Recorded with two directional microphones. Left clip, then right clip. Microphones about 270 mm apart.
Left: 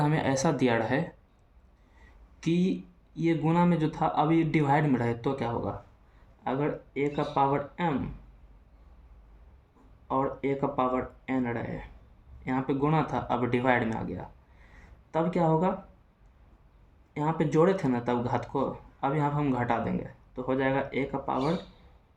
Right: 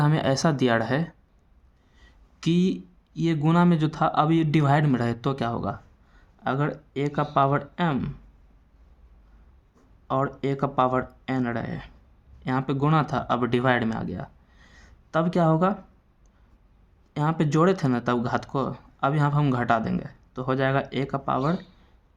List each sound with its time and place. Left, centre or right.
0.0 s speech: right
2.4 s speech: right
10.1 s speech: right
14.7 s a sound: right
17.2 s speech: right